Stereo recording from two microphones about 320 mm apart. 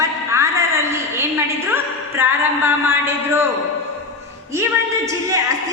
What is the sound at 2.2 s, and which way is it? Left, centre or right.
A woman's voice, centre.